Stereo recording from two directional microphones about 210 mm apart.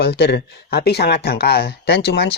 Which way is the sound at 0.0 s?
50° left (ahead or behind).